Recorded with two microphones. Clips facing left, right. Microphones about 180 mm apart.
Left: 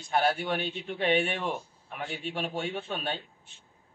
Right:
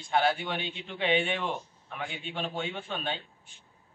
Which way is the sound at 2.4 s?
5° left (ahead or behind).